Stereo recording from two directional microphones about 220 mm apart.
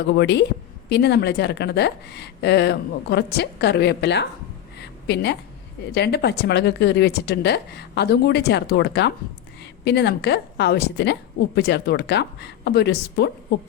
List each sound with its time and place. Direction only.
0.2 s a woman's voice: 50° left (ahead or behind)
4.8 s a sound: 50° left (ahead or behind)
5.9 s a woman's voice: 50° left (ahead or behind)